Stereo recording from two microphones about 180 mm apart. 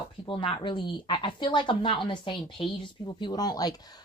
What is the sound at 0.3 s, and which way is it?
Speech, 30° left (ahead or behind).